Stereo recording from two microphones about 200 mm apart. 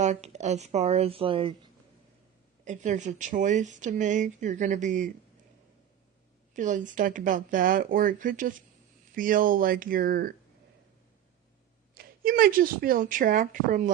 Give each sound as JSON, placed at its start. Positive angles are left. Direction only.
{"t": 0.0, "sound": "speech", "side_deg": -35}
{"t": 2.6, "sound": "speech", "side_deg": -35}
{"t": 6.5, "sound": "speech", "side_deg": -40}
{"t": 11.9, "sound": "speech", "side_deg": -45}